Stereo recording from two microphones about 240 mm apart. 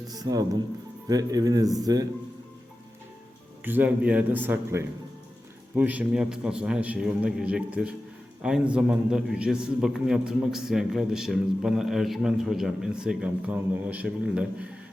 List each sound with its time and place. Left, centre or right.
0.1 s a man's voice: centre
3.6 s a man's voice: centre